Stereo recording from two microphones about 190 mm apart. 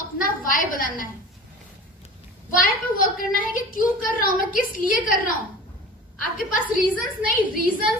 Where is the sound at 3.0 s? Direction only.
50° left (ahead or behind).